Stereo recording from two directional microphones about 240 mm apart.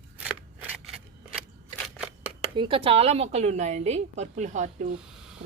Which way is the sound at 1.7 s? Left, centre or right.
Centre.